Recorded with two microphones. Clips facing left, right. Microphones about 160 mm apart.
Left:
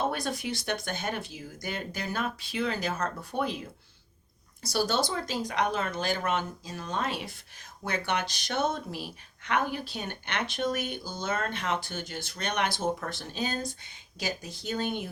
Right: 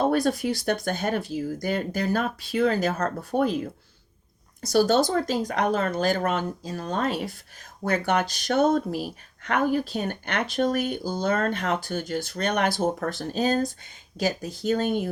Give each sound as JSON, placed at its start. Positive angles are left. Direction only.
{"t": 0.0, "sound": "speech", "side_deg": -40}
{"t": 4.7, "sound": "speech", "side_deg": -45}